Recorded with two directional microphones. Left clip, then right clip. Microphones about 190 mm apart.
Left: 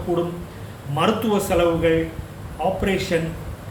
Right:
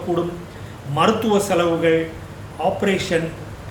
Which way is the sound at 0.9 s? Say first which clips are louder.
Right 3 dB; 10° right (ahead or behind).